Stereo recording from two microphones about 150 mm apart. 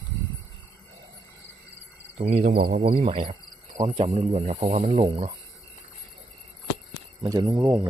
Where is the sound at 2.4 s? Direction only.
85° right.